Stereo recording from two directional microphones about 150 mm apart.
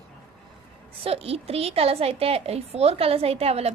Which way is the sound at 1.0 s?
40° right (ahead or behind).